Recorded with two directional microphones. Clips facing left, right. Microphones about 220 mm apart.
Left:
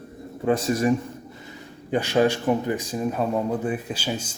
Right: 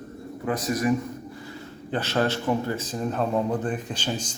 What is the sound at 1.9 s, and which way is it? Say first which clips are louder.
Speech: left 5 dB; 15° left (ahead or behind).